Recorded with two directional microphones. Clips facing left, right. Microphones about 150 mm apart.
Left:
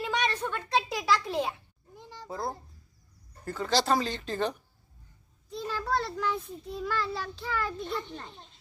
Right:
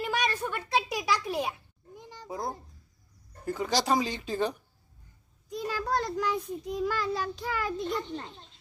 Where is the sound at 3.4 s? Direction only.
15° right (ahead or behind).